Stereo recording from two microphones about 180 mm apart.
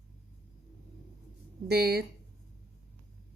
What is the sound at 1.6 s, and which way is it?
Speech, 60° right (ahead or behind).